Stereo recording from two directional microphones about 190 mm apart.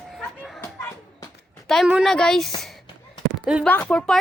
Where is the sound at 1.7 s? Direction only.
Centre (ahead or behind).